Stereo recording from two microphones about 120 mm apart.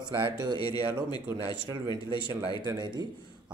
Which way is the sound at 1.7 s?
40° right (ahead or behind).